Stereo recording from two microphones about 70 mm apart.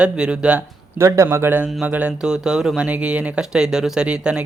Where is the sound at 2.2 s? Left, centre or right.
Centre.